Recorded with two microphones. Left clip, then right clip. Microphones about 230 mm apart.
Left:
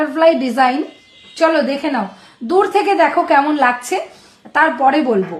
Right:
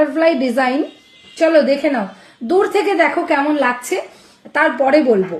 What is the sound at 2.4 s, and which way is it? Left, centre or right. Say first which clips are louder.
A woman's voice: left 1 dB; centre.